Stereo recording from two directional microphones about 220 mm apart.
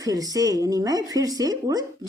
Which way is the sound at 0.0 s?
15° right (ahead or behind).